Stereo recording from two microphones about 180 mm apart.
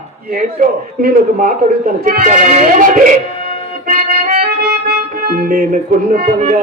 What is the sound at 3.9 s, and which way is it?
Music, 50° right (ahead or behind).